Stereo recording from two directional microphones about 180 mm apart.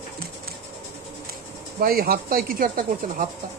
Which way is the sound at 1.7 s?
55° right (ahead or behind).